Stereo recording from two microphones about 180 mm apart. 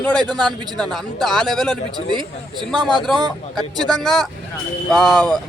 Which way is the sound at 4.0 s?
Centre (ahead or behind).